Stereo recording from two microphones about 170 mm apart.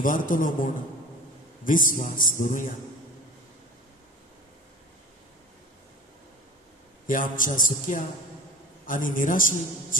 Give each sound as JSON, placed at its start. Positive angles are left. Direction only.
{"t": 0.0, "sound": "a man's voice", "side_deg": 50}
{"t": 1.6, "sound": "a man's voice", "side_deg": 50}
{"t": 7.1, "sound": "a man's voice", "side_deg": 50}